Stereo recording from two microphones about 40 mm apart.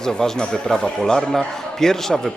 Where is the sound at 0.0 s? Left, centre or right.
Centre.